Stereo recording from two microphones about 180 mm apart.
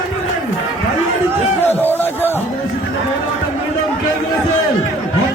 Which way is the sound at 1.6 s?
10° left (ahead or behind).